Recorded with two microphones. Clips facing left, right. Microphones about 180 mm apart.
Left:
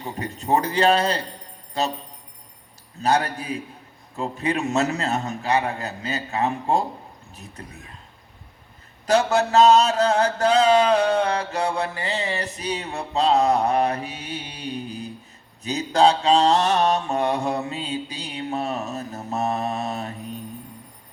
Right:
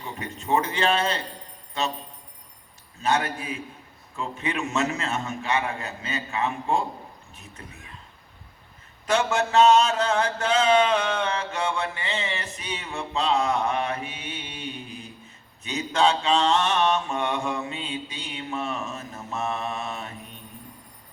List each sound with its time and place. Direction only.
0.0 s mantra: 35° left (ahead or behind)
3.0 s mantra: 40° left (ahead or behind)
9.0 s mantra: 40° left (ahead or behind)